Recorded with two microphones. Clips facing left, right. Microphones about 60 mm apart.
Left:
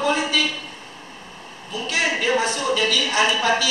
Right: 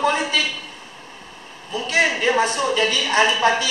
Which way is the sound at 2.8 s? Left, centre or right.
Right.